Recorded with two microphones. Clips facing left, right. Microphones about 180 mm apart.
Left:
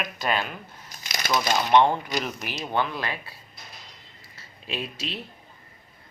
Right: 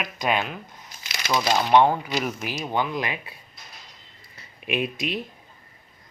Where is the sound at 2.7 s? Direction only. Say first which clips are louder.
Right 1 dB; 15° right (ahead or behind).